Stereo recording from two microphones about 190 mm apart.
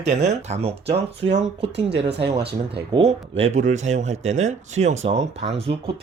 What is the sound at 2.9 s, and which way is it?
Speech, 30° right (ahead or behind).